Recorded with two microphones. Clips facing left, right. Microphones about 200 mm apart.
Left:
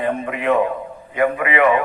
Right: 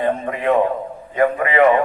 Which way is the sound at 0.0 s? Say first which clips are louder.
Right 1 dB; 35° right (ahead or behind).